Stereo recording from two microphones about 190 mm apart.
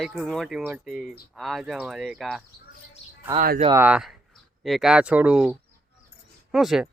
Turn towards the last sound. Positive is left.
turn(degrees=0)  # may be behind; listen again after turning